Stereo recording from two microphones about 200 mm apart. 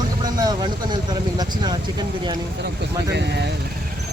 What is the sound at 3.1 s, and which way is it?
Speech, 60° right (ahead or behind).